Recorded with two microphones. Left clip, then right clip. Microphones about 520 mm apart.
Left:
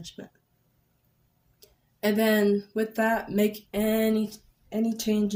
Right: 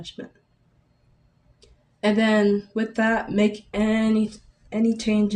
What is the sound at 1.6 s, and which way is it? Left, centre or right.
Speech, left.